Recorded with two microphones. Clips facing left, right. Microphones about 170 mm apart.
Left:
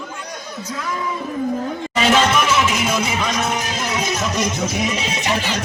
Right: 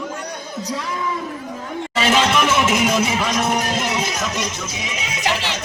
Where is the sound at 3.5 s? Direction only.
55° right (ahead or behind).